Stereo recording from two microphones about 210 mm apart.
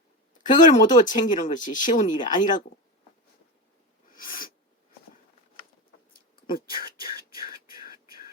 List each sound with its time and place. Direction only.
0.6 s speech: 35° left (ahead or behind)
4.1 s sneeze: 40° left (ahead or behind)
6.7 s speech: 45° left (ahead or behind)
7.3 s a sound: 45° left (ahead or behind)